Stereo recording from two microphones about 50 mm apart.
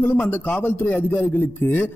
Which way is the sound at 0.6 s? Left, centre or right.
Left.